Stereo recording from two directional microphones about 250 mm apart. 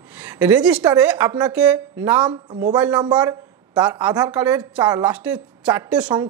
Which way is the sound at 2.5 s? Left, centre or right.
Right.